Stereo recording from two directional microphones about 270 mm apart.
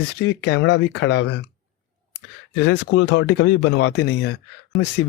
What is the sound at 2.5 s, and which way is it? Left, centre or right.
Speech, left.